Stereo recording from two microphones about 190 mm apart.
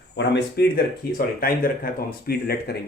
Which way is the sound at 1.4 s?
50° left (ahead or behind).